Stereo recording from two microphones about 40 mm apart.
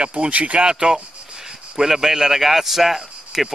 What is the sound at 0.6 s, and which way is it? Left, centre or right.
Speech, right.